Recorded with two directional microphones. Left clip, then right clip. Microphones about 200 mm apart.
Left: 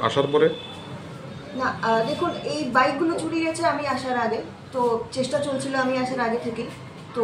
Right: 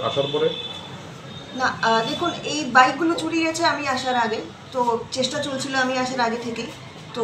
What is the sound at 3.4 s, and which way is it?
A woman's voice, 10° left (ahead or behind).